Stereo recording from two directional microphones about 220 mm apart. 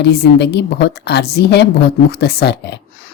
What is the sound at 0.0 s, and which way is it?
A woman's voice, 50° left (ahead or behind).